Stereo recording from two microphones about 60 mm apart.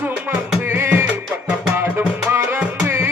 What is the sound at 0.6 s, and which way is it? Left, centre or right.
Music, right.